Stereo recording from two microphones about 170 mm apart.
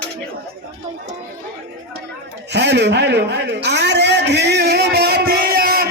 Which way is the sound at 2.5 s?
90° right.